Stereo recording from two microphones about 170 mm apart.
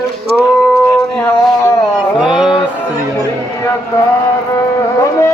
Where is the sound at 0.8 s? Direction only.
10° left (ahead or behind).